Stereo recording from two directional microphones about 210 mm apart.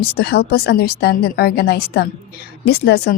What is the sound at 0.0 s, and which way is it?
A woman's voice, 50° left (ahead or behind).